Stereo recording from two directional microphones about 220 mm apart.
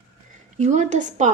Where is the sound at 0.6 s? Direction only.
30° right (ahead or behind).